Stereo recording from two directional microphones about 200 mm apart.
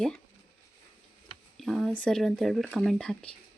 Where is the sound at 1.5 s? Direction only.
Centre (ahead or behind).